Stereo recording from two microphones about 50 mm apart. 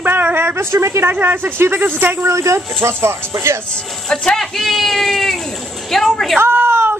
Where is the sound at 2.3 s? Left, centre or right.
Right.